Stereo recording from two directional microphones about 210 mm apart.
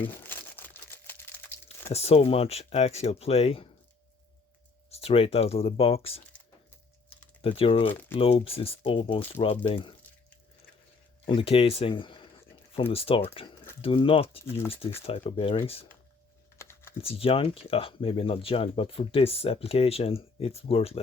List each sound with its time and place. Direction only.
0.1 s crumpling: 10° left (ahead or behind)
1.9 s speech: 30° left (ahead or behind)
4.9 s speech: 30° left (ahead or behind)
7.4 s speech: 25° left (ahead or behind)
7.9 s speech: 10° left (ahead or behind)
8.2 s speech: 30° left (ahead or behind)
11.3 s speech: 25° left (ahead or behind)
16.6 s typing: 10° left (ahead or behind)
17.0 s speech: 25° left (ahead or behind)